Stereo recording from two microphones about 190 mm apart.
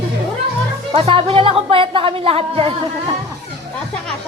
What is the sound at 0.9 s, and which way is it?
A woman's voice, 30° right (ahead or behind).